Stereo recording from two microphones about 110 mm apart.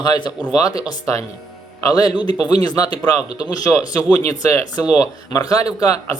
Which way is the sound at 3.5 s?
35° left (ahead or behind).